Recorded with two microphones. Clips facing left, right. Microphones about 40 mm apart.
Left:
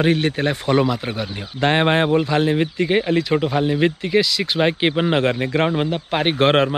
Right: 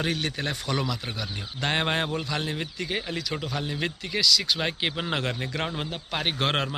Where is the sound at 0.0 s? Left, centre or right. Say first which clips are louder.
Left 10 dB; left.